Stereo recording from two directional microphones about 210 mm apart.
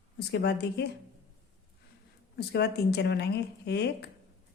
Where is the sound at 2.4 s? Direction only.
50° left (ahead or behind).